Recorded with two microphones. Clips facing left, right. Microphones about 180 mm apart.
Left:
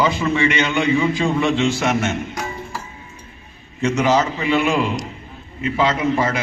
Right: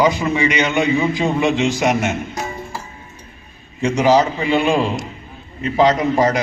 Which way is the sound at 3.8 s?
35° right (ahead or behind).